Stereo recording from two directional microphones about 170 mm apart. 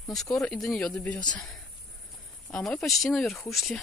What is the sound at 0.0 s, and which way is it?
Speech, centre (ahead or behind).